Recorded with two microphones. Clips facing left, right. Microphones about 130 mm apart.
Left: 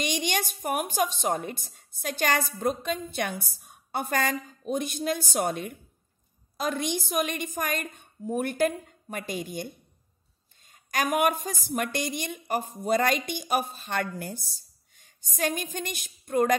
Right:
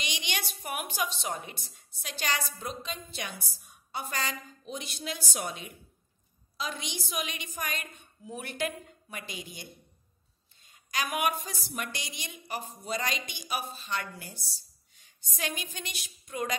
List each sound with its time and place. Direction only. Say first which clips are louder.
0.0 s a woman's voice: left 9 dB; 45° left (ahead or behind)